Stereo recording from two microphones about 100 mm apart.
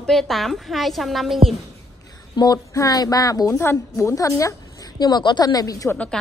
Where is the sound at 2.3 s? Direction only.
40° left (ahead or behind).